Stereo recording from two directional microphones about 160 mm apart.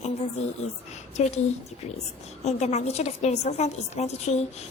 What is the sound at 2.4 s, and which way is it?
A woman's voice, 45° left (ahead or behind).